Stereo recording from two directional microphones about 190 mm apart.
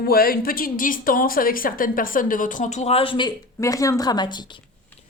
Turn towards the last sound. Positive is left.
turn(degrees=25)  # may be behind; listen again after turning